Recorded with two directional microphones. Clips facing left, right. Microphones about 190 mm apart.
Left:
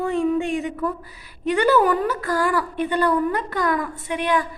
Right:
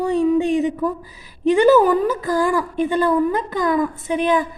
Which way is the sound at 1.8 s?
20° right (ahead or behind).